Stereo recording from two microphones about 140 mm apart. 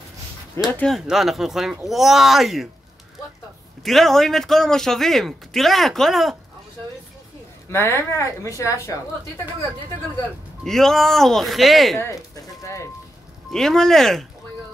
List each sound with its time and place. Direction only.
0.7 s speech: centre (ahead or behind)
3.8 s speech: centre (ahead or behind)
7.7 s speech: 20° left (ahead or behind)
10.6 s speech: 5° left (ahead or behind)
12.6 s speech: 20° left (ahead or behind)
13.5 s speech: 5° left (ahead or behind)